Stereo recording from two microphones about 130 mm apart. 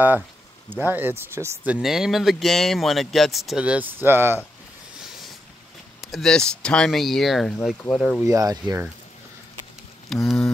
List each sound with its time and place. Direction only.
0.7 s speech: 15° right (ahead or behind)
1.7 s speech: 5° right (ahead or behind)
5.9 s speech: centre (ahead or behind)
8.3 s speech: 30° right (ahead or behind)
10.1 s speech: centre (ahead or behind)